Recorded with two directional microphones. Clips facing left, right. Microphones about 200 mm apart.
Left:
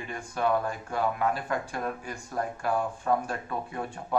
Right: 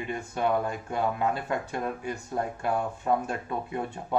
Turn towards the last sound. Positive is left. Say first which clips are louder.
# right 2 dB
turn(degrees=-20)  # may be behind; listen again after turning